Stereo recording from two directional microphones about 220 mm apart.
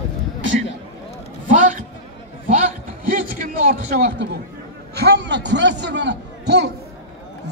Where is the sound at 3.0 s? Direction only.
40° right (ahead or behind).